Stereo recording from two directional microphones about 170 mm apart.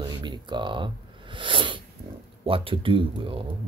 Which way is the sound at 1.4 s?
30° right (ahead or behind).